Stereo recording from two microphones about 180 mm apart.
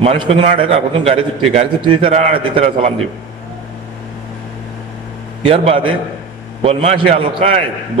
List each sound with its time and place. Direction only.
0.0 s a man's voice: 35° right (ahead or behind)
5.4 s a man's voice: 30° right (ahead or behind)